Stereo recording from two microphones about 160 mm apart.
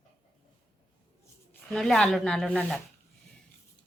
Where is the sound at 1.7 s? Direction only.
Centre (ahead or behind).